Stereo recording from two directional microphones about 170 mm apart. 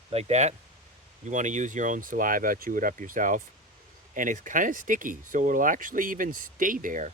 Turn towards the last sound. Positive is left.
turn(degrees=-50)  # may be behind; listen again after turning